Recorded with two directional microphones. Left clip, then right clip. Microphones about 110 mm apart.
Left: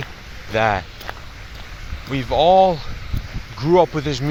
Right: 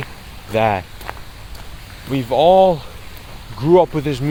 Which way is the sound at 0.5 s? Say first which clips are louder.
Right 2 dB; 60° right (ahead or behind).